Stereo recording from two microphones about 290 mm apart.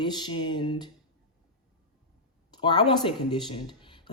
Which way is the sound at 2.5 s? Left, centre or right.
Centre.